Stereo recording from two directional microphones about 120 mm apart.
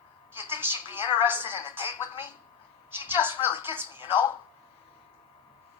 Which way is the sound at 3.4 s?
50° left (ahead or behind).